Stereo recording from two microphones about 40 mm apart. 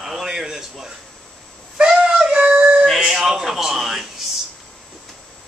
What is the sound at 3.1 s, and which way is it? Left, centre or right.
Speech, centre.